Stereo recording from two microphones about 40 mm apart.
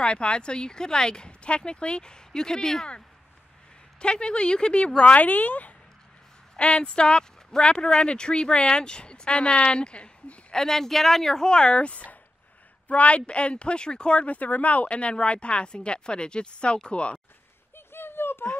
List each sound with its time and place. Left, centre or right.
0.0 s speech: left
4.0 s speech: left
6.5 s speech: left
10.5 s speech: centre; by 17.2 s left
17.7 s a sound: left